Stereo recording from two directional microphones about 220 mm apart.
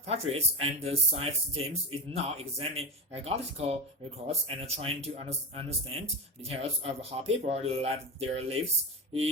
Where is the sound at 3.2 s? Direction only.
30° right (ahead or behind).